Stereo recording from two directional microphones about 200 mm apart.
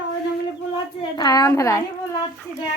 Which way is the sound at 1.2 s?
20° left (ahead or behind).